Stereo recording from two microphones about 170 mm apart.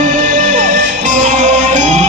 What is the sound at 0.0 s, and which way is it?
Music, 45° right (ahead or behind).